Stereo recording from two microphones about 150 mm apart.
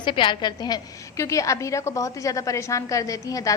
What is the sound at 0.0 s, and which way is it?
A woman's voice, 30° left (ahead or behind).